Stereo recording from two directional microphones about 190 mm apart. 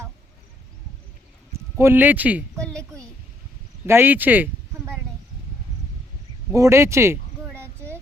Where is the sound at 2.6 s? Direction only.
5° left (ahead or behind).